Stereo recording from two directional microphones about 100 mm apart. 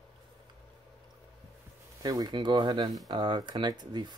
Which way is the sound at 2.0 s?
40° right (ahead or behind).